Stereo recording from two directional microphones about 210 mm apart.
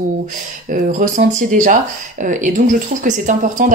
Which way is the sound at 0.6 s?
40° right (ahead or behind).